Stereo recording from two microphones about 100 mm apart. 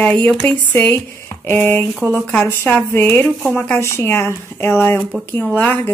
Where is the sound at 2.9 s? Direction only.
25° left (ahead or behind).